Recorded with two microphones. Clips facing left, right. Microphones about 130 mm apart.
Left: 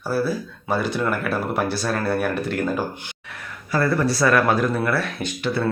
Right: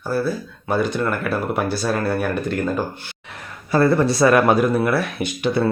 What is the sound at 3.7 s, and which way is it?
Speech, 25° right (ahead or behind).